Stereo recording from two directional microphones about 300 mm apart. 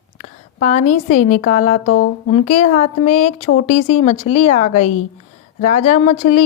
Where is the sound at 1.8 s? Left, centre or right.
Left.